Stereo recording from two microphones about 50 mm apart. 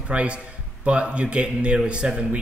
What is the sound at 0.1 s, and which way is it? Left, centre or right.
A man's voice, right.